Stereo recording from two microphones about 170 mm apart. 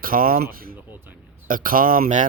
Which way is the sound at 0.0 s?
55° right (ahead or behind).